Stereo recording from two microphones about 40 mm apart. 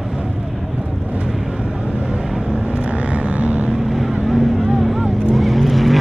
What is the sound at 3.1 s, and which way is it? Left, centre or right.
Vehicle, right.